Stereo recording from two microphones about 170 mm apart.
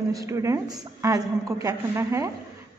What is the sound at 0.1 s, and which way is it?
A woman's voice, 20° right (ahead or behind).